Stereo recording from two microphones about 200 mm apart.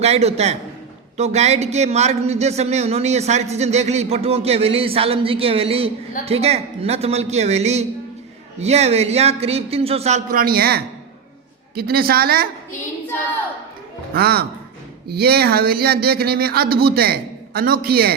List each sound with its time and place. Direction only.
0.0 s a man's voice: 30° right (ahead or behind); by 12.5 s 50° right (ahead or behind)
14.1 s speech: 50° right (ahead or behind)